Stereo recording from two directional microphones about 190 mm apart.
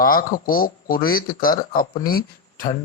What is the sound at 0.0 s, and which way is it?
Speech, 50° left (ahead or behind).